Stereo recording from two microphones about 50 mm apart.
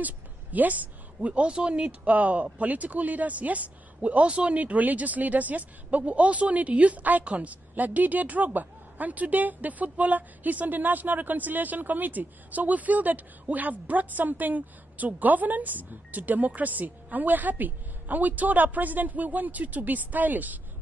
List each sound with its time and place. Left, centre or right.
0.0 s a woman's voice: right